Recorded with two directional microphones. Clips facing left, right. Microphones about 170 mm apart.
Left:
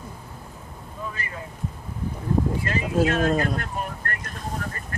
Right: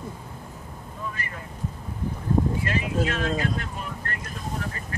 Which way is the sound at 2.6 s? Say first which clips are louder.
Left 3 dB; 45° left (ahead or behind).